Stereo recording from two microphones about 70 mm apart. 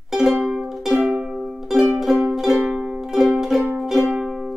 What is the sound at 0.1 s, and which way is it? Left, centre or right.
Music, centre.